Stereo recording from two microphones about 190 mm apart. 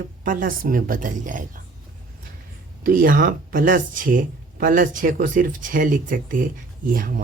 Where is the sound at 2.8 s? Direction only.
50° right (ahead or behind).